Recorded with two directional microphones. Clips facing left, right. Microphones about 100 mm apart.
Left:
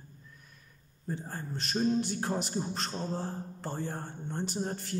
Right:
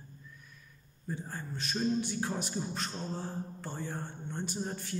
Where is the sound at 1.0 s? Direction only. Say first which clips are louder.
Left 2 dB; 40° left (ahead or behind).